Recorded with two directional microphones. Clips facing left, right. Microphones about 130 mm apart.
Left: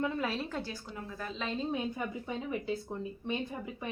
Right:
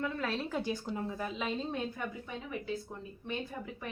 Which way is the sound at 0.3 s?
Centre (ahead or behind).